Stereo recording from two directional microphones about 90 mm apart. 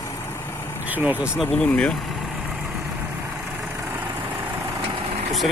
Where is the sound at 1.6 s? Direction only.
10° left (ahead or behind).